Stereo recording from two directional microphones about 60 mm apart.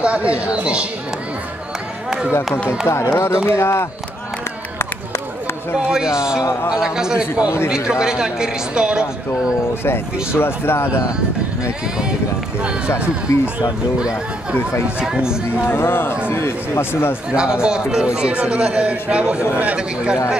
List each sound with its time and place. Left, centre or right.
0.0 s speech: right
2.0 s run: centre
2.9 s speech: left
5.8 s a man's voice: centre
10.3 s speech: left
13.3 s speech: left
15.0 s a man's voice: centre
15.7 s speech: left
17.3 s a man's voice: centre